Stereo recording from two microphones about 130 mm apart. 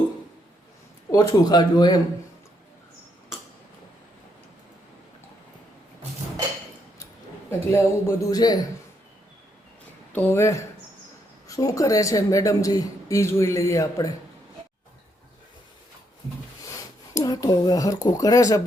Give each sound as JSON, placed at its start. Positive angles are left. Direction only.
{"t": 1.1, "sound": "speech", "side_deg": 30}
{"t": 7.7, "sound": "a man's voice", "side_deg": 20}
{"t": 10.1, "sound": "a man's voice", "side_deg": 15}
{"t": 16.6, "sound": "speech", "side_deg": 25}